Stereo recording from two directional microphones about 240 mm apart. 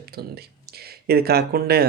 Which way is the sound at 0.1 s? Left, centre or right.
Right.